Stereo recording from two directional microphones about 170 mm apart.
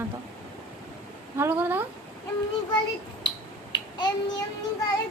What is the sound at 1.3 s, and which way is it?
Speech, 10° right (ahead or behind).